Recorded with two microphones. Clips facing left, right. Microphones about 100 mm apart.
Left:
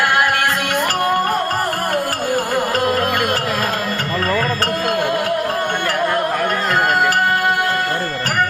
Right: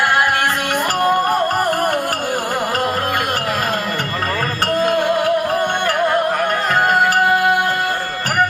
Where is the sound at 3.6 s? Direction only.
20° right (ahead or behind).